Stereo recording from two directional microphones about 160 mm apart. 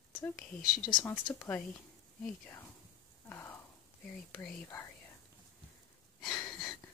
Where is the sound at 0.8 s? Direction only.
25° left (ahead or behind).